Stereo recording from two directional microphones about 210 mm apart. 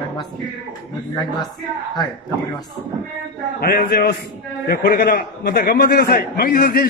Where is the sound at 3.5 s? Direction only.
45° left (ahead or behind).